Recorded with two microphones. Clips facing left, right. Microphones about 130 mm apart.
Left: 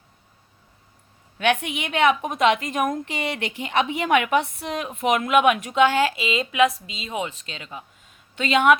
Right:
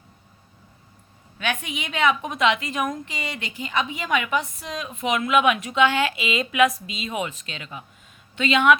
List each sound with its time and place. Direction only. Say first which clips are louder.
1.4 s a woman's voice: left 6 dB; 65° left (ahead or behind); by 7.9 s 30° left (ahead or behind)
8.4 s a woman's voice: left 1 dB; 45° left (ahead or behind)